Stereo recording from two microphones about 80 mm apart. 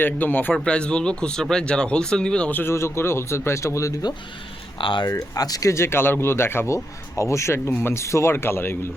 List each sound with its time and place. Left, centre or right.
0.0 s a man's voice: left
0.5 s speech: centre
2.5 s a man's voice: left
2.7 s speech: left
4.8 s speech: left
5.1 s speech: left